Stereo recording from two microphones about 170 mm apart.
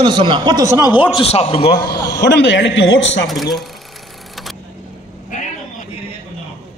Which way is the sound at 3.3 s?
Centre (ahead or behind).